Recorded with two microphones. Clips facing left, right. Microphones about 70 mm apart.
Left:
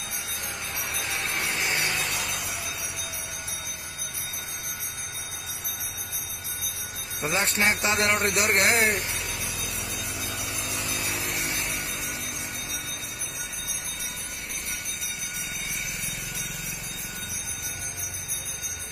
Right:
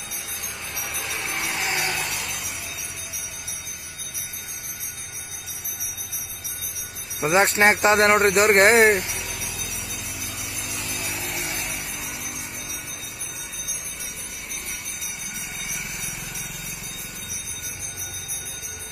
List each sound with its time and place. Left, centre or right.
1.4 s vehicle: right
2.0 s a sound: centre
7.2 s speech: right